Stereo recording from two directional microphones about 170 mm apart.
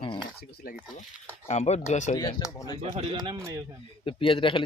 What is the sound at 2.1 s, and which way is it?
Speech, 25° left (ahead or behind).